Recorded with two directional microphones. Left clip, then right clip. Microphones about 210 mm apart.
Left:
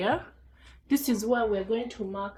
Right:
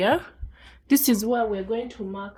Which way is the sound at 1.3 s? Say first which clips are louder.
Right 2 dB; 35° right (ahead or behind).